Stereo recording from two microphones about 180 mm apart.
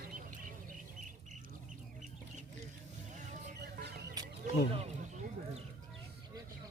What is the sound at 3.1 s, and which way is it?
Vehicle, 45° right (ahead or behind).